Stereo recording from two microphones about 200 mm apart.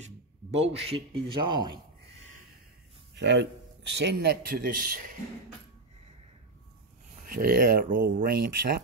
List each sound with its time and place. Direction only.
0.6 s speech: 30° right (ahead or behind)
3.2 s a man's voice: 60° right (ahead or behind); by 5.1 s 45° right (ahead or behind)
7.2 s speech: 45° right (ahead or behind)